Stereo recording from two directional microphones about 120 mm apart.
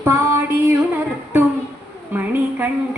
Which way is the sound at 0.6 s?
15° right (ahead or behind).